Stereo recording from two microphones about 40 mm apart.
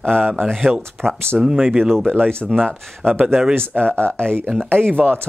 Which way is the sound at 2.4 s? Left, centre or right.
Centre.